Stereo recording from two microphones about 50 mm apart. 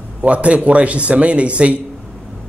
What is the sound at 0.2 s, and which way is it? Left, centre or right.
A man's voice, right.